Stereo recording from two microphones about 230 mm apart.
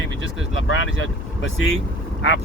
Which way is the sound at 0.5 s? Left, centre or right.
Left.